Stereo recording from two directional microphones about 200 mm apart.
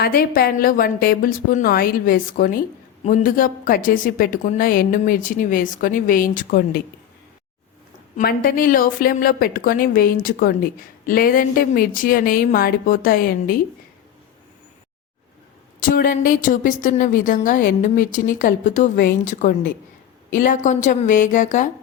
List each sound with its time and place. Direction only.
0.0 s a woman's voice: 45° left (ahead or behind)
8.1 s a woman's voice: 45° left (ahead or behind)
15.9 s a woman's voice: 45° left (ahead or behind)